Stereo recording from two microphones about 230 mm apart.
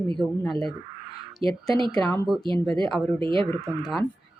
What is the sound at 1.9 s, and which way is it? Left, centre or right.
Speech, centre.